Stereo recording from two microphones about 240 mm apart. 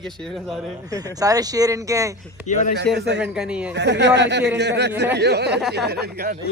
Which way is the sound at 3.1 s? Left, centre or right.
Centre.